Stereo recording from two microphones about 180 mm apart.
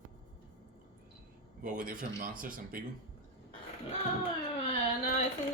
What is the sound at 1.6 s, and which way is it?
A man's voice, 50° right (ahead or behind).